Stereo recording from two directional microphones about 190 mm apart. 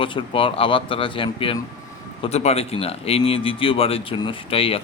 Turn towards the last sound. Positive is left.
turn(degrees=30)  # may be behind; listen again after turning